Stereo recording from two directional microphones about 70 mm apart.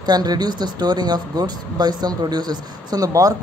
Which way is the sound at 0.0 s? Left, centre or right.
Right.